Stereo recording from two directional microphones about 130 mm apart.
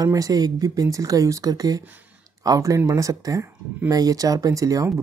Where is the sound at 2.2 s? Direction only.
25° right (ahead or behind).